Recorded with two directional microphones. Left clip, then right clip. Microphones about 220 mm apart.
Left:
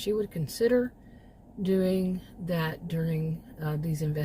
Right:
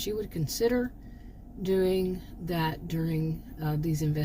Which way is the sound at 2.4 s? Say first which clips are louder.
Right 1 dB; 15° left (ahead or behind).